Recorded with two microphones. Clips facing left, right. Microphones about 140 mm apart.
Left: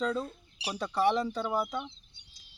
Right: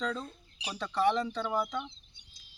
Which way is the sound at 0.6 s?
70° left (ahead or behind).